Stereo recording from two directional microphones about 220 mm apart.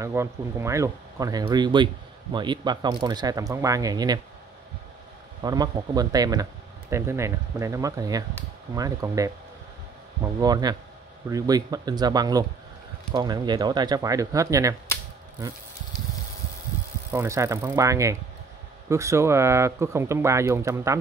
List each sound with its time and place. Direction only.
0.0 s speech: 10° right (ahead or behind)
5.4 s speech: 15° right (ahead or behind)
10.4 s speech: 20° right (ahead or behind)
17.1 s speech: 10° right (ahead or behind)